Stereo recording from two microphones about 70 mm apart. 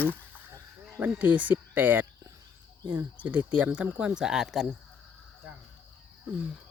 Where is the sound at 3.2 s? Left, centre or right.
Right; by 4.7 s centre.